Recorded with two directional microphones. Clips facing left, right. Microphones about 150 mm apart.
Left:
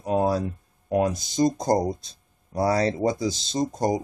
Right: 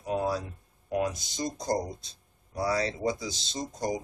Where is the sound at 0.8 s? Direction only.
45° left (ahead or behind).